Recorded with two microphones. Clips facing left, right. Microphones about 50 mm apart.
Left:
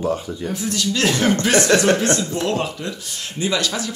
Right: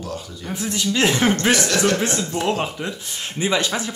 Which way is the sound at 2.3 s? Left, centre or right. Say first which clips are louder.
Even; right.